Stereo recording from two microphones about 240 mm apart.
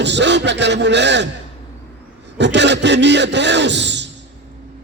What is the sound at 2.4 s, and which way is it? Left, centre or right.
A man's voice, right.